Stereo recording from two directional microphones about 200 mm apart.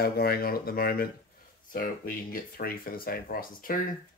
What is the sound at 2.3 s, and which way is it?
Speech, 45° left (ahead or behind).